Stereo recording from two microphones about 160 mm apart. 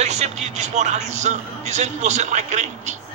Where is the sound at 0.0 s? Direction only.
45° right (ahead or behind).